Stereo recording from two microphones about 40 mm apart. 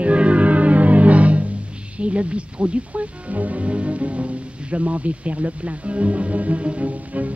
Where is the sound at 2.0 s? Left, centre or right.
Right.